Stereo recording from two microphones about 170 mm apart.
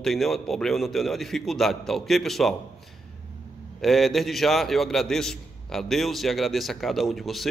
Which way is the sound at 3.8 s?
Centre (ahead or behind).